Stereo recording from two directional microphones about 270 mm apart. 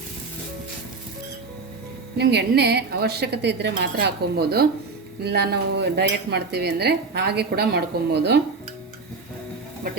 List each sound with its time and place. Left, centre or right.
2.1 s cutlery: right